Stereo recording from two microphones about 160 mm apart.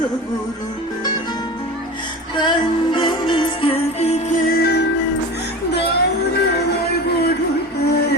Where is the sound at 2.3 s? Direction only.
30° left (ahead or behind); by 4.4 s 45° left (ahead or behind).